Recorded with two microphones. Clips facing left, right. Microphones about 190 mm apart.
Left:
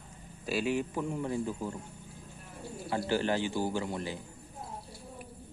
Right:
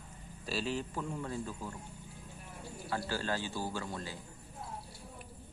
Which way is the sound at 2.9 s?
20° left (ahead or behind).